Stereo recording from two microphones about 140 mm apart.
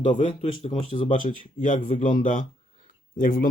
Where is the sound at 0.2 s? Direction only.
50° left (ahead or behind).